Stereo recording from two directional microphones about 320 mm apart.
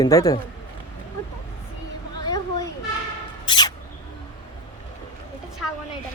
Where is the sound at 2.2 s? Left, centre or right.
Centre.